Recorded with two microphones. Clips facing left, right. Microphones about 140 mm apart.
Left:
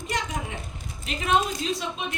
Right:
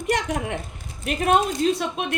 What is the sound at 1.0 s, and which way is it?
A woman's voice, 55° right (ahead or behind).